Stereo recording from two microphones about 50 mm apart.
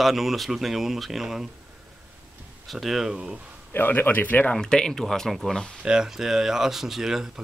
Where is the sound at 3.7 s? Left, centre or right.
Left.